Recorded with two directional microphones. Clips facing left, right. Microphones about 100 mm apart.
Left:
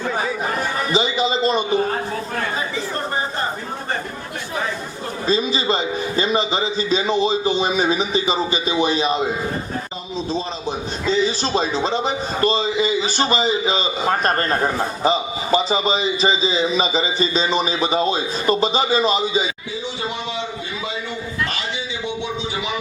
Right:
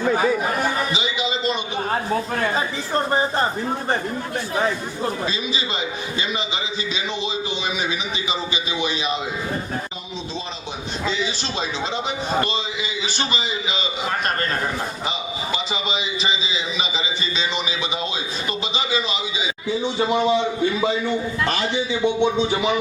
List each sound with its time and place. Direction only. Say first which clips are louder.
0.9 s a sound: left 6 dB; 40° left (ahead or behind)
5.2 s a man's voice: left 6 dB; 40° left (ahead or behind)
11.1 s a man's voice: left 10 dB; 40° left (ahead or behind)